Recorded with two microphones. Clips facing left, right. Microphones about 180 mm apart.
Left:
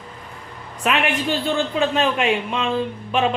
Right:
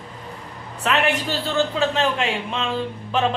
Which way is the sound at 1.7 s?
15° left (ahead or behind).